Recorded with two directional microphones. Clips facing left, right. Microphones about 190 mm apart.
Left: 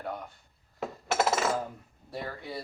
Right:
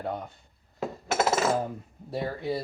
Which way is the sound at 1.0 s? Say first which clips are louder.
Right 1 dB; centre (ahead or behind).